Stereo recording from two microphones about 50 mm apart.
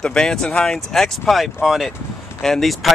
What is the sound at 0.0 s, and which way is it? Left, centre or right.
Speech, centre.